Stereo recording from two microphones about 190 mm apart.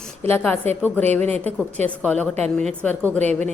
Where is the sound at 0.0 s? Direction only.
10° left (ahead or behind).